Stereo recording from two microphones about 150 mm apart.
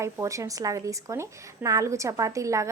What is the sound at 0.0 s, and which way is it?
A woman's voice, 20° right (ahead or behind).